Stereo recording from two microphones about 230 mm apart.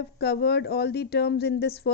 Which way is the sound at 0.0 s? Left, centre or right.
Left.